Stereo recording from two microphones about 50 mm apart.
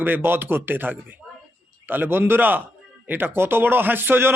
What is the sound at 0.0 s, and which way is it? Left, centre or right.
A man's voice, right.